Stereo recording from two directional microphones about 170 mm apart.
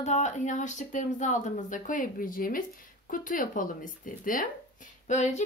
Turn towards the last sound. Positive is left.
turn(degrees=45)  # may be behind; listen again after turning